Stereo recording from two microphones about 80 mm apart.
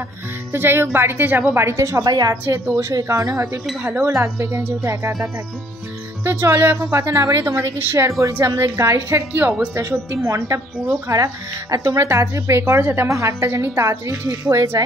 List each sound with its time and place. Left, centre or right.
0.5 s a woman's voice: right
2.0 s a woman's voice: right
2.4 s a woman's voice: right
2.8 s a woman's voice: right
6.8 s a woman's voice: right
9.3 s a woman's voice: right
9.8 s a woman's voice: right